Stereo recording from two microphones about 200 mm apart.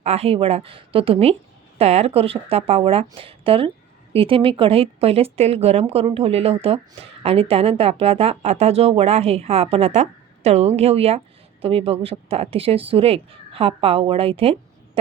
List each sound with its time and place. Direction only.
0.0 s a woman's voice: 30° right (ahead or behind)